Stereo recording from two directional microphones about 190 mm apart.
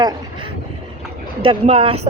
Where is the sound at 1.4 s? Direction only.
30° right (ahead or behind).